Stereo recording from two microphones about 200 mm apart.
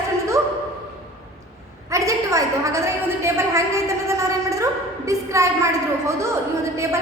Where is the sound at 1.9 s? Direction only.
15° right (ahead or behind).